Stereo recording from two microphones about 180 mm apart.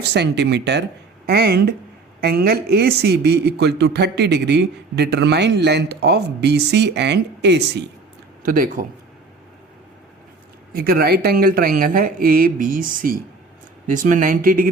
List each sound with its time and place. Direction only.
0.1 s speech: 70° right (ahead or behind)
1.3 s speech: 60° right (ahead or behind)
8.4 s speech: 50° right (ahead or behind)
10.8 s speech: 55° right (ahead or behind)